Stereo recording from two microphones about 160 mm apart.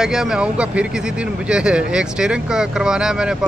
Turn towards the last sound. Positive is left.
turn(degrees=-5)  # may be behind; listen again after turning